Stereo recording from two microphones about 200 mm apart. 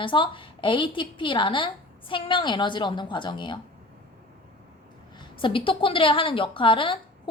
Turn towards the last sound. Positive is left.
turn(degrees=25)  # may be behind; listen again after turning